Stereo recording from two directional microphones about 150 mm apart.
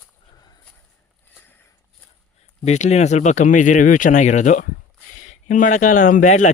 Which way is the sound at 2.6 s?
50° left (ahead or behind).